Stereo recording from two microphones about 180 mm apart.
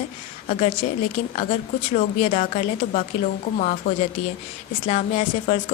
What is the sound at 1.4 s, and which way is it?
A woman's voice, 40° left (ahead or behind).